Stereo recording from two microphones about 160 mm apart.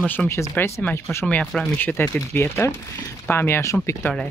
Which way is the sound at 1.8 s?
15° left (ahead or behind).